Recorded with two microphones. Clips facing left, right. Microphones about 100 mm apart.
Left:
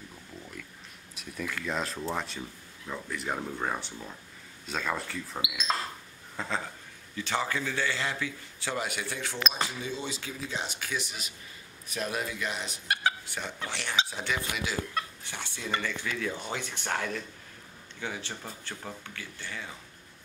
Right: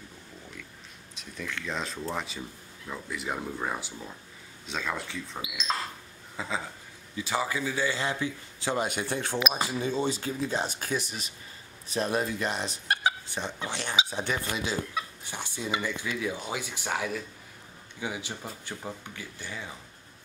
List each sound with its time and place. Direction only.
1.1 s speech: 5° left (ahead or behind)
6.3 s a sound: 5° right (ahead or behind)
7.2 s speech: 10° right (ahead or behind)
9.1 s speech: 45° right (ahead or behind)
13.0 s speech: 20° right (ahead or behind)
15.2 s speech: 15° right (ahead or behind)